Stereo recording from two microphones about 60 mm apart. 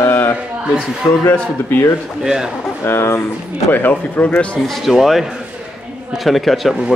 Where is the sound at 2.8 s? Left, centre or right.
Left.